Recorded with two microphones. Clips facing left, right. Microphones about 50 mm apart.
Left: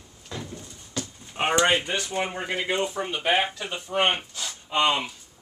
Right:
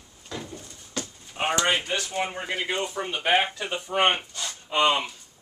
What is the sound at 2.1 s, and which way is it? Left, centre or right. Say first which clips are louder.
Speech: left 1 dB; centre.